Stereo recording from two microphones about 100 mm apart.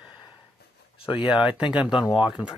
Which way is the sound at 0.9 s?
70° left (ahead or behind).